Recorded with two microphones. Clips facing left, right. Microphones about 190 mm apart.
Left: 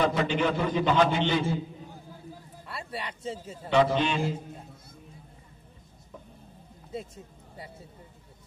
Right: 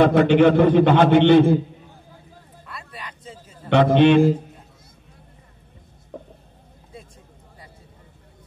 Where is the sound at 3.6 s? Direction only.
65° right (ahead or behind).